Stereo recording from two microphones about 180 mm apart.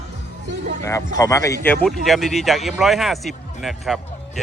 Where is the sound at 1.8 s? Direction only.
Centre (ahead or behind).